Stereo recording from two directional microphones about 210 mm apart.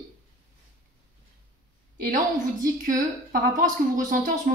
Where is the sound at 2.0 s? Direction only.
40° right (ahead or behind).